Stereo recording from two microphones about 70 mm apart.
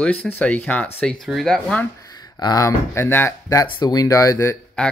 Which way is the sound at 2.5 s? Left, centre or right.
Left.